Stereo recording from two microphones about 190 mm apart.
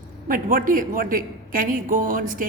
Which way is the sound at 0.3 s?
45° right (ahead or behind).